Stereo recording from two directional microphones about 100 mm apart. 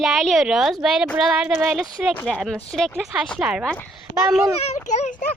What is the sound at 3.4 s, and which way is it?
Speech, 10° right (ahead or behind).